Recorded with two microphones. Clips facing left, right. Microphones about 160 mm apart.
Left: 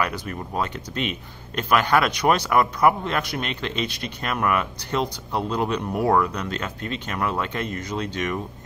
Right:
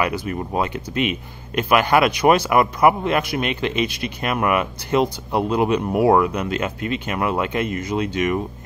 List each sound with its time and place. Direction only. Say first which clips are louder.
0.3 s speech: right 5 dB; 15° right (ahead or behind)